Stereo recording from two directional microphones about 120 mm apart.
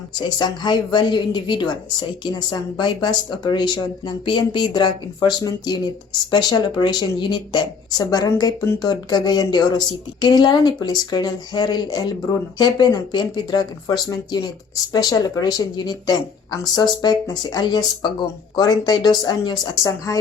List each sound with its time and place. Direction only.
0.2 s a woman's voice: 35° left (ahead or behind)